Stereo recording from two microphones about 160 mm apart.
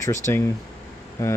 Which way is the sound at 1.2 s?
20° left (ahead or behind).